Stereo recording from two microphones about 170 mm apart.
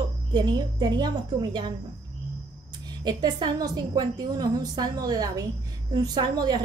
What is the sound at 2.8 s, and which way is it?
A woman's voice, 25° right (ahead or behind).